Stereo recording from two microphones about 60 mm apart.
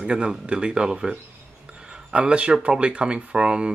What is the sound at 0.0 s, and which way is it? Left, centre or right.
Speech, centre.